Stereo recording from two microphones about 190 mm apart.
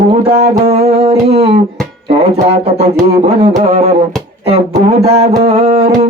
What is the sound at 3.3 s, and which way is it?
Music, 35° right (ahead or behind).